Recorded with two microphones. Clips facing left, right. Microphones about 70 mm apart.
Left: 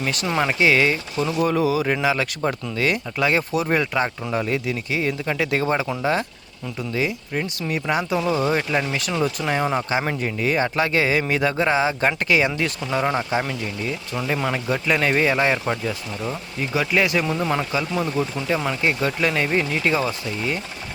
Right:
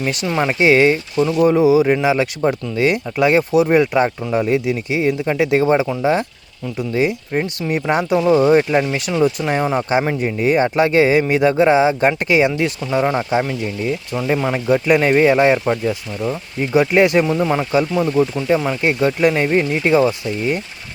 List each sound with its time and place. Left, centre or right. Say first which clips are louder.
0.3 s speech: right 3 dB; centre
0.6 s speech: right 6 dB; right
1.2 s speech: right 7 dB; centre
6.9 s speech: right 6 dB; right
9.1 s speech: right 6 dB; centre; by 17.2 s right
17.2 s speech: right 5 dB; centre
18.8 s speech: right 6 dB; right